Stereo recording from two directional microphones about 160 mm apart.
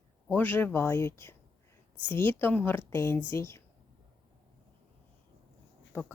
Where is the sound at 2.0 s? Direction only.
30° right (ahead or behind).